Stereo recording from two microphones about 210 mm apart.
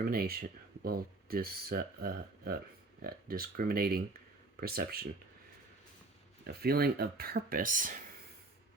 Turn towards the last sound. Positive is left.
turn(degrees=-40)  # may be behind; listen again after turning